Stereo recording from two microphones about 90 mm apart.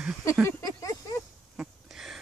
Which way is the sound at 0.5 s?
35° left (ahead or behind).